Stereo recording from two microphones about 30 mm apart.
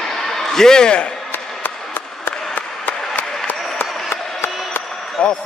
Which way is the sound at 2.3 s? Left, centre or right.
Left.